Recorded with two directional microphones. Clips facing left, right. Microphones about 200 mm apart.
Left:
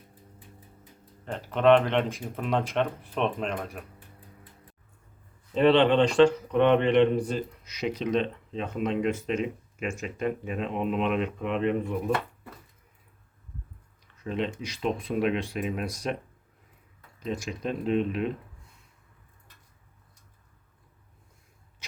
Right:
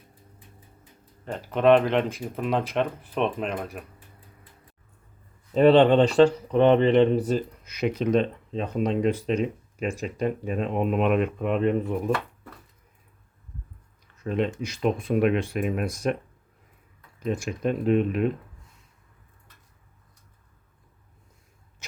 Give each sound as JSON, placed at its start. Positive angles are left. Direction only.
{"t": 1.2, "sound": "speech", "side_deg": -5}
{"t": 5.5, "sound": "speech", "side_deg": -40}
{"t": 7.3, "sound": "speech", "side_deg": -45}
{"t": 14.3, "sound": "speech", "side_deg": -50}
{"t": 17.2, "sound": "speech", "side_deg": -50}